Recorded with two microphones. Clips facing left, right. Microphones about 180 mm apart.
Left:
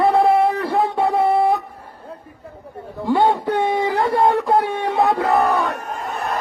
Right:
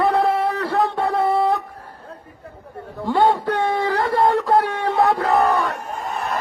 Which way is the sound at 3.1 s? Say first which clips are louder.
Left 1 dB; 15° left (ahead or behind).